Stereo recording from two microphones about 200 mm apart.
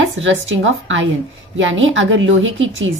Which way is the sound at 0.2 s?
70° right (ahead or behind).